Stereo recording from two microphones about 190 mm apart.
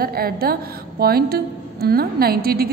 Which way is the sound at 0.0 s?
55° right (ahead or behind).